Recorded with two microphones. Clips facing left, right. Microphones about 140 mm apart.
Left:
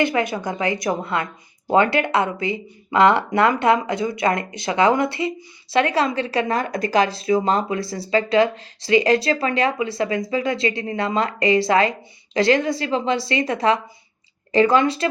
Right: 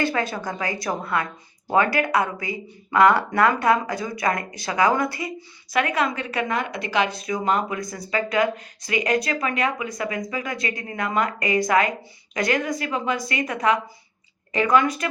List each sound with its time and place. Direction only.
0.0 s speech: 20° left (ahead or behind)